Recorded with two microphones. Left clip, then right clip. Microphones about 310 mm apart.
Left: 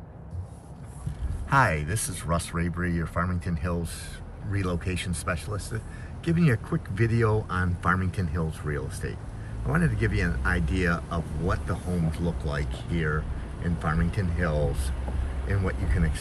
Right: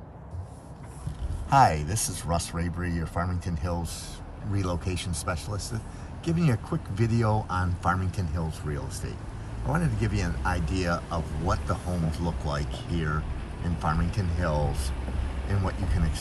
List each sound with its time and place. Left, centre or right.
1.5 s speech: centre